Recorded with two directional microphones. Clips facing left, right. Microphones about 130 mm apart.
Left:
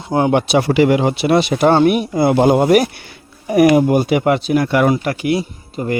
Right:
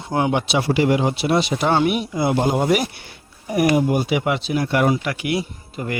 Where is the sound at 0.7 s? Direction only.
80° left; by 1.7 s 55° left (ahead or behind).